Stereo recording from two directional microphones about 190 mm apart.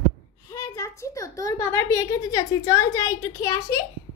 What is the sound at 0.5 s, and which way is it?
A woman's voice, 15° left (ahead or behind).